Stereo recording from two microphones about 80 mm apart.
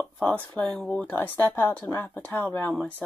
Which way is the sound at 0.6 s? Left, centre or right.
Centre.